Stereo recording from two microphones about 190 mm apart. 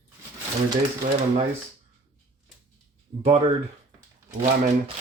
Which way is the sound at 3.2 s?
30° right (ahead or behind).